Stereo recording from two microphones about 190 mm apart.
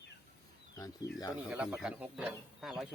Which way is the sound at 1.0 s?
15° left (ahead or behind).